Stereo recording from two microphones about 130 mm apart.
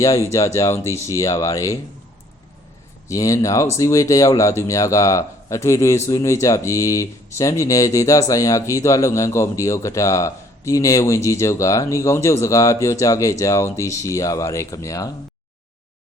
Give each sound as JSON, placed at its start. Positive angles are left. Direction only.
{"t": 0.0, "sound": "speech", "side_deg": 25}
{"t": 3.1, "sound": "speech", "side_deg": 25}